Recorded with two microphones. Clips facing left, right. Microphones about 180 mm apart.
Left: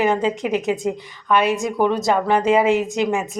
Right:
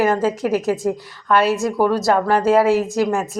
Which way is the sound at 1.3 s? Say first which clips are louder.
Right 2 dB; 15° left (ahead or behind).